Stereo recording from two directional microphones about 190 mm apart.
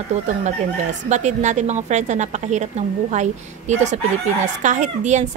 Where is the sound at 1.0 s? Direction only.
40° right (ahead or behind).